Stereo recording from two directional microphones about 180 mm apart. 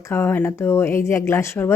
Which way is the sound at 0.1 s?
10° left (ahead or behind).